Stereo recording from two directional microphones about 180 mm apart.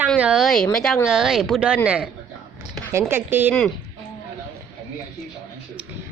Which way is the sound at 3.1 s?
10° right (ahead or behind).